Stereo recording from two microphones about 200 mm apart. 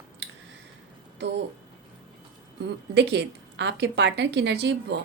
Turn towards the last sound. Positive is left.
turn(degrees=-60)  # may be behind; listen again after turning